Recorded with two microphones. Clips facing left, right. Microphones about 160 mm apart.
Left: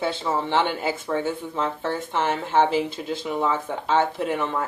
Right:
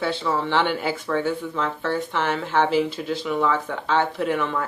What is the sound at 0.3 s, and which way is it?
Speech, 20° left (ahead or behind).